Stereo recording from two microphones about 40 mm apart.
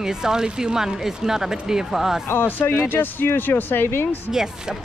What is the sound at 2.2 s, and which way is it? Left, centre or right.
Speech, left.